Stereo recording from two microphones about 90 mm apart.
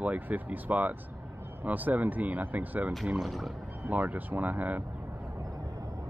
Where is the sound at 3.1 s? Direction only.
Centre (ahead or behind).